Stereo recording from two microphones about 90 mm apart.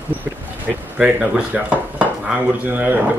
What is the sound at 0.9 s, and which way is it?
Speech, 10° right (ahead or behind).